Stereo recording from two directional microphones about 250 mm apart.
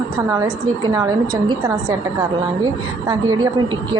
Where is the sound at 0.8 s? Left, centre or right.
Centre.